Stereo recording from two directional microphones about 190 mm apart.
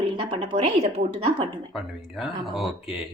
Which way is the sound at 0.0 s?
30° right (ahead or behind).